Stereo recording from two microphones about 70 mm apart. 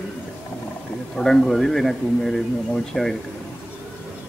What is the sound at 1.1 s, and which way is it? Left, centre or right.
A man's voice, centre.